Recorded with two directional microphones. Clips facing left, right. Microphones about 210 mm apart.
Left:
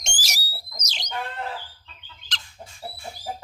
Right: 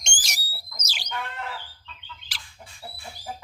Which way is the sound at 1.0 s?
35° left (ahead or behind).